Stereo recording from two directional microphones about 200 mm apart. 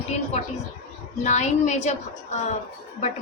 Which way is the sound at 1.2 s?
35° left (ahead or behind).